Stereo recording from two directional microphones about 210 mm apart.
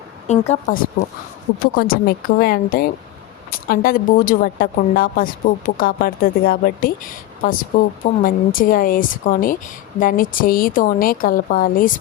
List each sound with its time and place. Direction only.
0.3 s speech: 30° left (ahead or behind)
1.7 s speech: 45° left (ahead or behind)